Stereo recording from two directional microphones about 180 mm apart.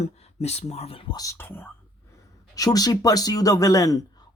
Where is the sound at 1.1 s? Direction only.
15° left (ahead or behind).